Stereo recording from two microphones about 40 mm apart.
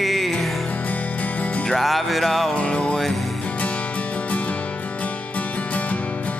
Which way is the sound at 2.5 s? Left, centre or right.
Left.